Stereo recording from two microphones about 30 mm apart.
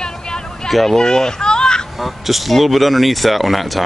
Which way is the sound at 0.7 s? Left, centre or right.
Centre.